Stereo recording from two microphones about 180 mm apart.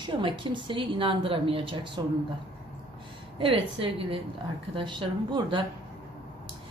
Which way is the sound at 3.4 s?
30° right (ahead or behind).